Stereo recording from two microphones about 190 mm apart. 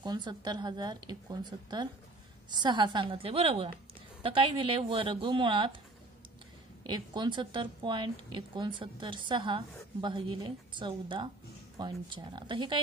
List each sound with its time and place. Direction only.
0.0 s a woman's voice: 25° right (ahead or behind)
6.9 s a woman's voice: 25° right (ahead or behind)